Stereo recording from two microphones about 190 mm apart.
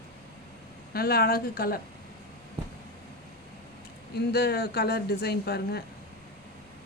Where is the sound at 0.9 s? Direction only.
55° left (ahead or behind).